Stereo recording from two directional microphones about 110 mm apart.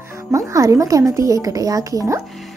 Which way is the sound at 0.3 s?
30° right (ahead or behind).